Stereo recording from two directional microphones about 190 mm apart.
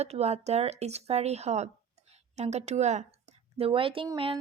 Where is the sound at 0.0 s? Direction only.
35° right (ahead or behind).